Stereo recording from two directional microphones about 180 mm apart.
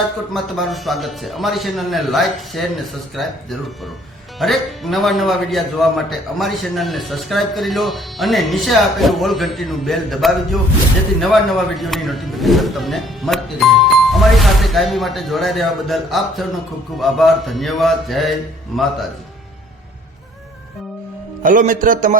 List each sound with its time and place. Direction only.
0.5 s a man's voice: centre (ahead or behind)
4.4 s a man's voice: centre (ahead or behind)
21.4 s speech: 50° right (ahead or behind)